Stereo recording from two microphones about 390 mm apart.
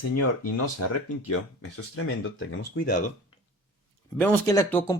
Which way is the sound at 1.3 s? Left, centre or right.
Left.